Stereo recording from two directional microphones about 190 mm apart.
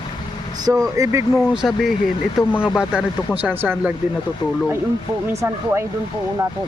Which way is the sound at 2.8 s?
5° right (ahead or behind).